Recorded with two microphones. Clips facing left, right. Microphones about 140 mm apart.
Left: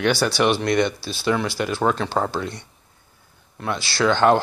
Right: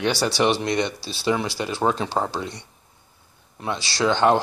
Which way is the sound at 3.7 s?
30° right (ahead or behind).